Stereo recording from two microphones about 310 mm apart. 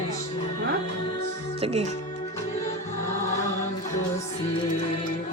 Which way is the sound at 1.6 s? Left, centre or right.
Right.